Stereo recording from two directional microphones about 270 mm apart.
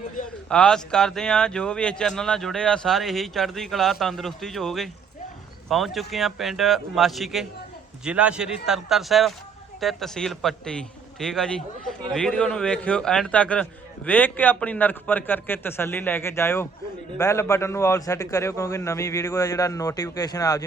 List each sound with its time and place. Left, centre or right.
0.4 s a man's voice: centre